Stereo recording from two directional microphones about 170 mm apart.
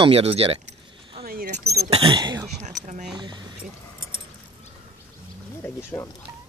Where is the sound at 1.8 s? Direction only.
35° right (ahead or behind).